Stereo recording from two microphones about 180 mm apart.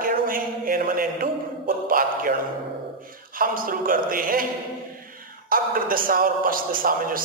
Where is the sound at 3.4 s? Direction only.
50° right (ahead or behind).